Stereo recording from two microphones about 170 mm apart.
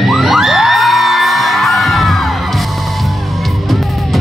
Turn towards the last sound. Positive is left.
turn(degrees=0)  # may be behind; listen again after turning